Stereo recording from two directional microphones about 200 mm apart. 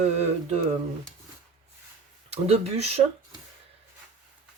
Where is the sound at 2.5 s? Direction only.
30° right (ahead or behind).